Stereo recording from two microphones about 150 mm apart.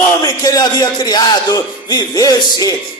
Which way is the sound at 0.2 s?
25° left (ahead or behind).